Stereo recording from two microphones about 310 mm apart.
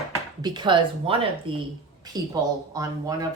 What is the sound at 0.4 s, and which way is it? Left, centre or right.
Speech, centre.